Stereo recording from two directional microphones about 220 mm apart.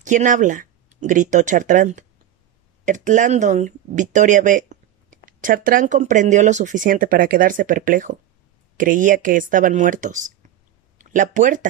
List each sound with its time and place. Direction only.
0.0 s speech: 35° right (ahead or behind)